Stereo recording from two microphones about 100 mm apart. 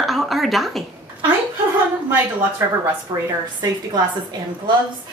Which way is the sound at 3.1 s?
40° right (ahead or behind).